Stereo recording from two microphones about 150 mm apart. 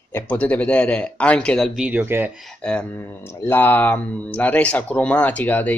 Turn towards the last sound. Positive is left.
turn(degrees=10)  # may be behind; listen again after turning